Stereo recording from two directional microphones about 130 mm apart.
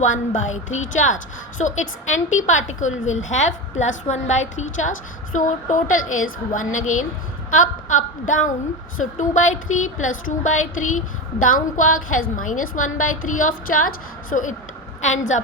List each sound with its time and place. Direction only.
0.0 s a woman's voice: 70° left (ahead or behind)
9.1 s a woman's voice: 70° left (ahead or behind); by 14.5 s 90° left
15.0 s a woman's voice: 70° left (ahead or behind)